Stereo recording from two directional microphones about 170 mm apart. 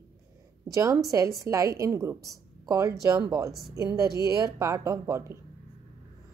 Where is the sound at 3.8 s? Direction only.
20° right (ahead or behind).